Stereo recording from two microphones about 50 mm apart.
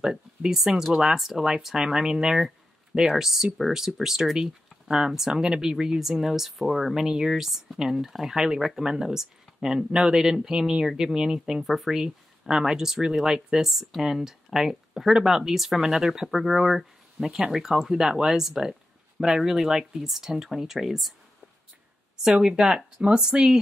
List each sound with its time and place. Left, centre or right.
0.0 s speech: centre
11.6 s speech: centre
12.0 s speech: centre
22.6 s speech: centre